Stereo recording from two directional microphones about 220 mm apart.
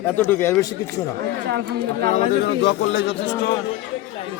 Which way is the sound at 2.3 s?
50° left (ahead or behind).